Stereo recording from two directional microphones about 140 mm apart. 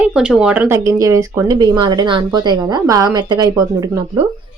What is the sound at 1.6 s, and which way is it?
Speech, 30° right (ahead or behind).